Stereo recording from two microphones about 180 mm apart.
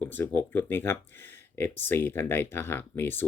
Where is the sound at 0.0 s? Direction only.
10° left (ahead or behind).